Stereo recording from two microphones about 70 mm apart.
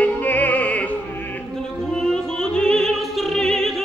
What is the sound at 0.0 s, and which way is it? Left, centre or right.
Music, left.